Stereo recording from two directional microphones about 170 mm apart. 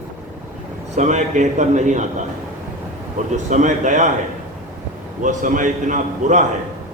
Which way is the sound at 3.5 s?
45° right (ahead or behind).